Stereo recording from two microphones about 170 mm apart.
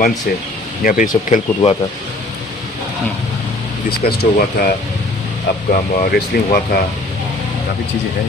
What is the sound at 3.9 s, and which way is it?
Speech, 65° left (ahead or behind).